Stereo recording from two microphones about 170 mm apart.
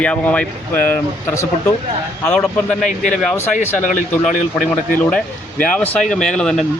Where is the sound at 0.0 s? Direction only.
10° left (ahead or behind).